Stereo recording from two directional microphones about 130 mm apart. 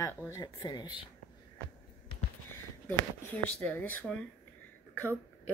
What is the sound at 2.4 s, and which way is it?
Speech, 15° left (ahead or behind).